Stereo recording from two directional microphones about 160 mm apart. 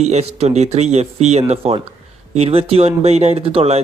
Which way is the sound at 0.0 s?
45° right (ahead or behind).